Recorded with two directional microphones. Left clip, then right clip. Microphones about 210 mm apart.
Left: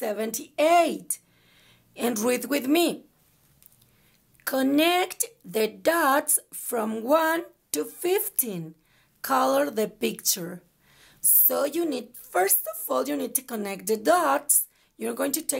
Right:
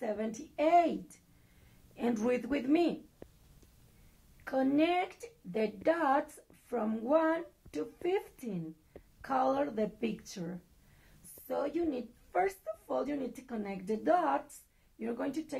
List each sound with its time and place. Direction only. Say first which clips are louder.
0.0 s a woman's voice: left 8 dB; 40° left (ahead or behind)
4.5 s a woman's voice: left 7 dB; 45° left (ahead or behind)